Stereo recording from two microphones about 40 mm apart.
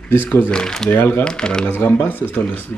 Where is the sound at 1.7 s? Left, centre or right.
Left.